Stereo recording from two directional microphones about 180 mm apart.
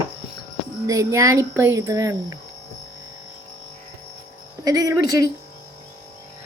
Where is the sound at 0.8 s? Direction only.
15° right (ahead or behind).